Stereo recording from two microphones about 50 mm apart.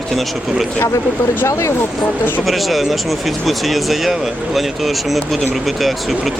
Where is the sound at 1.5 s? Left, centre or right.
Left.